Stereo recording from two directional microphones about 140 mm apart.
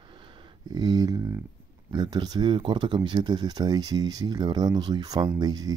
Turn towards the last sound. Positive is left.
turn(degrees=-30)  # may be behind; listen again after turning